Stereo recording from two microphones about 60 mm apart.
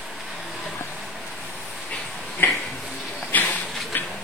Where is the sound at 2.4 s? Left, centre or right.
Left.